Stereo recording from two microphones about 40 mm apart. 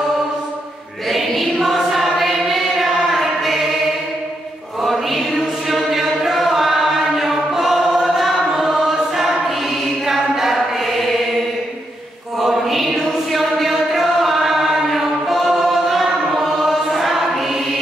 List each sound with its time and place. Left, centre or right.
1.0 s music: centre
1.6 s choir: centre
4.8 s choir: centre
5.7 s chant: centre
12.4 s mantra: centre
12.9 s chant: centre